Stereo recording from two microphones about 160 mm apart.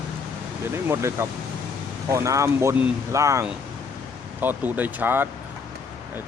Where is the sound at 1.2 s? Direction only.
15° right (ahead or behind).